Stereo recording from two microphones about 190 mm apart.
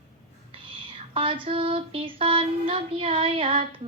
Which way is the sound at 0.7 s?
25° right (ahead or behind).